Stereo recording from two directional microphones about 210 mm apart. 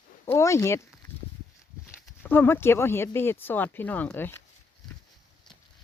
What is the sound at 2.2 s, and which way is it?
Speech, 10° left (ahead or behind).